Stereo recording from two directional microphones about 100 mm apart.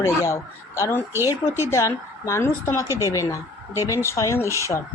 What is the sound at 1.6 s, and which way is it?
A woman's voice, 30° left (ahead or behind).